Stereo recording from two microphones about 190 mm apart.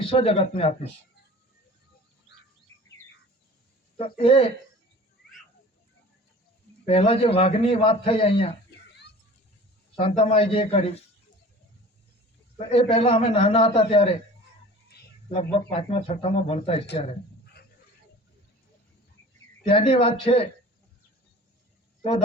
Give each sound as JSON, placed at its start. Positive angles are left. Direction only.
{"t": 0.0, "sound": "a man's voice", "side_deg": 30}
{"t": 3.9, "sound": "speech", "side_deg": 30}
{"t": 6.8, "sound": "a man's voice", "side_deg": 30}
{"t": 10.0, "sound": "a man's voice", "side_deg": 30}
{"t": 12.5, "sound": "a man's voice", "side_deg": 30}
{"t": 15.3, "sound": "a man's voice", "side_deg": 30}
{"t": 19.6, "sound": "speech", "side_deg": 30}